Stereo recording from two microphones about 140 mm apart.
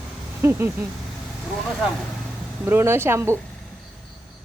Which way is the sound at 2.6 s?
15° right (ahead or behind).